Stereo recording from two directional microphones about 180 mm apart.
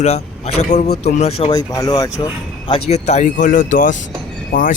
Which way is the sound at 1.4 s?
20° left (ahead or behind).